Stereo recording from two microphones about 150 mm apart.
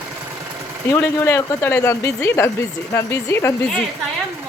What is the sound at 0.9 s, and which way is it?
Speech, 15° left (ahead or behind).